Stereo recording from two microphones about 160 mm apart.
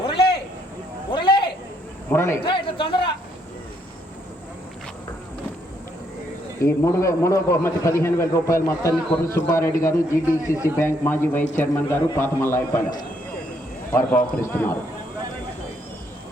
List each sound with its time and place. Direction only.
0.0 s a sound: 35° left (ahead or behind)
2.0 s a man's voice: 15° left (ahead or behind)
2.4 s a man's voice: 30° left (ahead or behind)
6.6 s a man's voice: 20° left (ahead or behind)
14.4 s a man's voice: 15° left (ahead or behind)